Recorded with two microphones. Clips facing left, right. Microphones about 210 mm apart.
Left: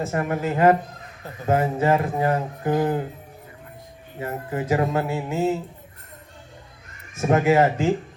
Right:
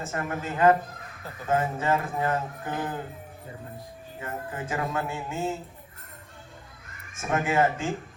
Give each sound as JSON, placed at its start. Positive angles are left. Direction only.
{"t": 0.1, "sound": "a man's voice", "side_deg": 35}
{"t": 4.2, "sound": "a man's voice", "side_deg": 35}
{"t": 7.2, "sound": "a man's voice", "side_deg": 35}